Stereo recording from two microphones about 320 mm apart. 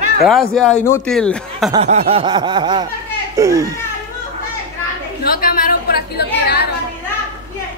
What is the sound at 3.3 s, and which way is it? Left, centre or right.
Speech, centre.